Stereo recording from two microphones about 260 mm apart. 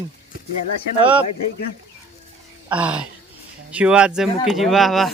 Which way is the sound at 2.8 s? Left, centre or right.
Centre.